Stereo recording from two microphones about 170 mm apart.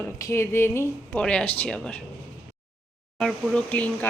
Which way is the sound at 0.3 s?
15° left (ahead or behind).